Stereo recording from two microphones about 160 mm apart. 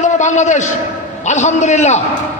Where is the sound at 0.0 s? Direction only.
50° left (ahead or behind).